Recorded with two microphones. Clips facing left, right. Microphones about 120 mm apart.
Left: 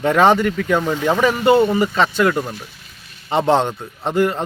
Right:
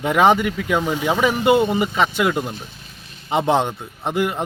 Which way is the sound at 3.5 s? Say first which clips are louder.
Left 3 dB; 15° right (ahead or behind).